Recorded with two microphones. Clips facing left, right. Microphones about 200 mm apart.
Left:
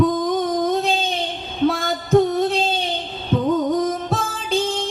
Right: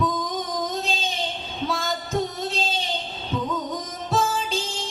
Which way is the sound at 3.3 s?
55° left (ahead or behind).